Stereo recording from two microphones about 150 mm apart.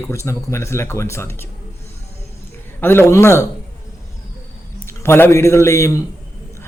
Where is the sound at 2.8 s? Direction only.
15° left (ahead or behind).